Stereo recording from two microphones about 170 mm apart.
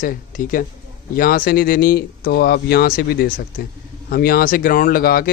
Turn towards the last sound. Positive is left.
turn(degrees=60)  # may be behind; listen again after turning